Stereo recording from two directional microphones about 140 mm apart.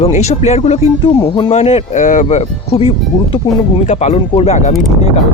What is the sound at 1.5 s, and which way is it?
Speech, 50° left (ahead or behind).